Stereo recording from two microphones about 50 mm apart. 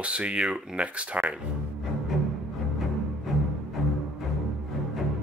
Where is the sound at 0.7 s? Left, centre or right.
Right.